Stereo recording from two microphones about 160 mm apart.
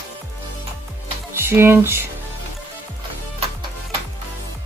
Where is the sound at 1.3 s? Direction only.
15° right (ahead or behind).